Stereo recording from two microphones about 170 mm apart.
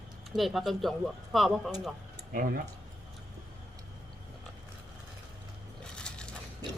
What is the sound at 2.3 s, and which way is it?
Speech, 55° right (ahead or behind).